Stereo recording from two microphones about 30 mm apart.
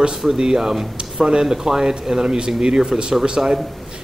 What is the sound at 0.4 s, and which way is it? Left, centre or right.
Speech, right.